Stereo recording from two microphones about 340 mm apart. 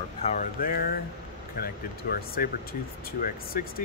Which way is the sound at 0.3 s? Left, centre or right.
Left.